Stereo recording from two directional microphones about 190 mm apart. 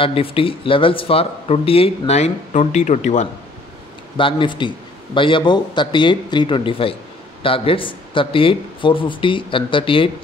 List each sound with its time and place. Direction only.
0.0 s speech: 30° left (ahead or behind)
4.2 s a man's voice: 25° left (ahead or behind)